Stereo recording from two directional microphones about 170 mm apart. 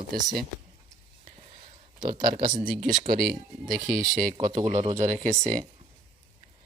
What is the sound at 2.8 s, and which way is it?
Speech, 50° right (ahead or behind).